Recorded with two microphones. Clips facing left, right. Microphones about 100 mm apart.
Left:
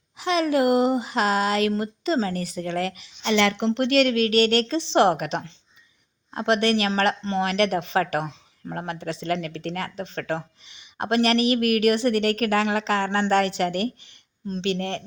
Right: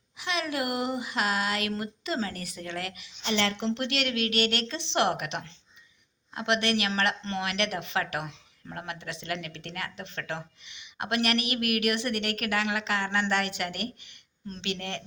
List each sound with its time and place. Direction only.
0.2 s speech: 35° left (ahead or behind)
3.2 s speech: 90° left
3.7 s speech: 50° left (ahead or behind); by 15.0 s 35° left (ahead or behind)